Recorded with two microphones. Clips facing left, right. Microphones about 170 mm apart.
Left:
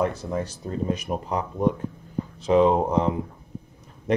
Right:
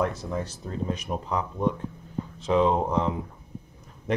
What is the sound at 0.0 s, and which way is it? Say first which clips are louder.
Speech: left 2 dB; 5° left (ahead or behind).